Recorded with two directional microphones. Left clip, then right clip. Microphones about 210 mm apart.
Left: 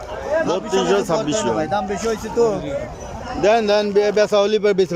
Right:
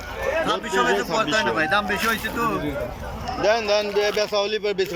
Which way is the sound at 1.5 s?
25° left (ahead or behind).